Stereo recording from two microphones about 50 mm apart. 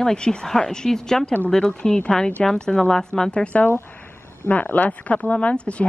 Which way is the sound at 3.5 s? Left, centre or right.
Left.